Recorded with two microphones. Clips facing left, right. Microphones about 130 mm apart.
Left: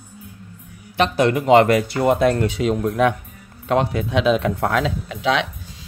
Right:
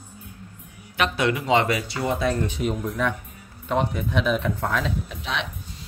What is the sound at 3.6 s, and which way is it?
Speech, 90° left.